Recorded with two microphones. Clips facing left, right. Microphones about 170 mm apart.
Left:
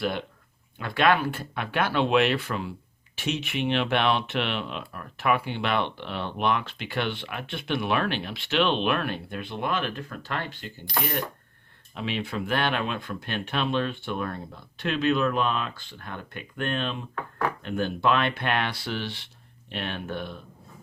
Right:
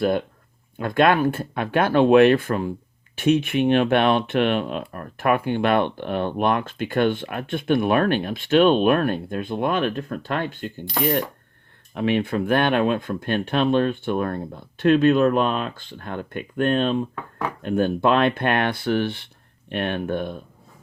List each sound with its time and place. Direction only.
0.0 s speech: 45° right (ahead or behind)
11.9 s speech: 55° right (ahead or behind)